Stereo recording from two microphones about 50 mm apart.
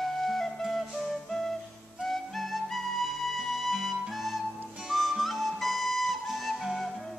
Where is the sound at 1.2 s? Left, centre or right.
Centre.